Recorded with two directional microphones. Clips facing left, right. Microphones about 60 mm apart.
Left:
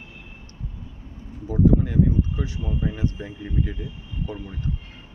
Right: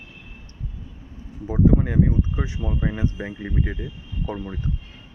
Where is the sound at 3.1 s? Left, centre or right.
Right.